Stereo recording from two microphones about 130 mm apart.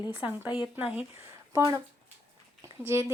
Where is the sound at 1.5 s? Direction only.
25° right (ahead or behind).